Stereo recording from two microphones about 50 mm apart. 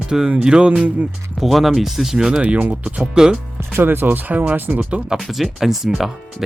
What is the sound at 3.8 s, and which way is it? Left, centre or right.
Speech, right.